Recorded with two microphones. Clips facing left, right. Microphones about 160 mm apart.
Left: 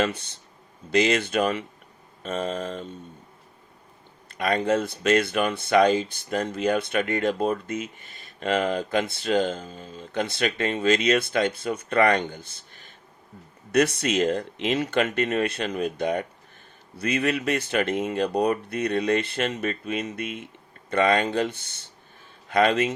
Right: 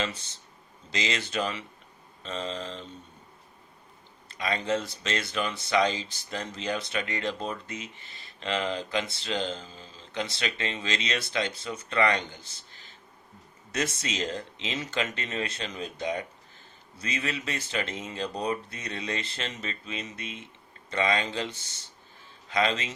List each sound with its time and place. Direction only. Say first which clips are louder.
0.0 s speech: left 7 dB; 60° left (ahead or behind)
4.3 s a man's voice: left 6 dB; 55° left (ahead or behind)